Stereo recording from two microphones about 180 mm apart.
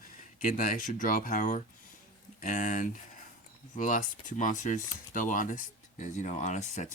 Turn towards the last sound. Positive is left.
turn(degrees=45)  # may be behind; listen again after turning